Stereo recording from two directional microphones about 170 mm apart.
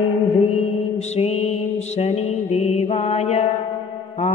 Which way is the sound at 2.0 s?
40° left (ahead or behind).